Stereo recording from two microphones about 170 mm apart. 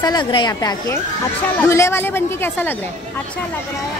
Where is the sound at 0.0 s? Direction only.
25° left (ahead or behind).